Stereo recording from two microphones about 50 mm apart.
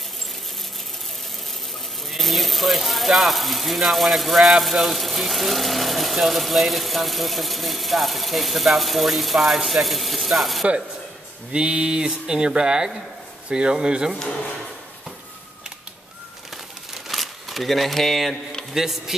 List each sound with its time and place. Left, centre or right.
2.0 s speech: centre
11.5 s speech: centre
17.1 s a sound: centre
18.7 s speech: centre